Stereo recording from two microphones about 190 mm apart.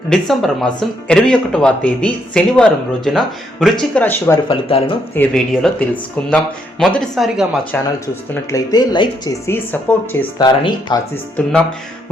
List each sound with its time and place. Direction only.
0.1 s speech: centre (ahead or behind)
4.4 s speech: 25° left (ahead or behind)
5.1 s speech: 5° left (ahead or behind)
8.4 s speech: 20° left (ahead or behind)
9.7 s speech: 10° left (ahead or behind)
10.4 s speech: 25° left (ahead or behind)
11.4 s speech: 5° left (ahead or behind)